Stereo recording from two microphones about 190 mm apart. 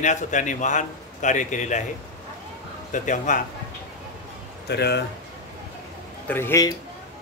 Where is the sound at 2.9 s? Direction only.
40° left (ahead or behind).